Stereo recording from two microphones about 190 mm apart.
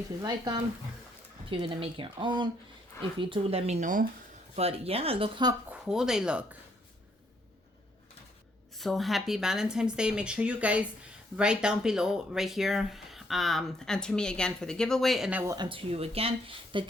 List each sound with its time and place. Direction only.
0.2 s speech: 20° right (ahead or behind)
5.6 s speech: 5° right (ahead or behind)
8.8 s speech: centre (ahead or behind)
15.5 s speech: 25° right (ahead or behind)